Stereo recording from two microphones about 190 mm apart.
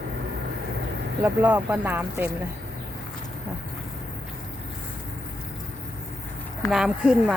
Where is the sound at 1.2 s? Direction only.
10° right (ahead or behind).